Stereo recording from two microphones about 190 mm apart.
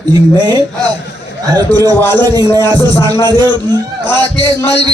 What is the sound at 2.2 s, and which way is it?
A man's voice, 20° right (ahead or behind).